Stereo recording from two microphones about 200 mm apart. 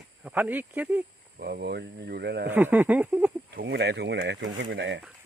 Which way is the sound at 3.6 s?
55° right (ahead or behind).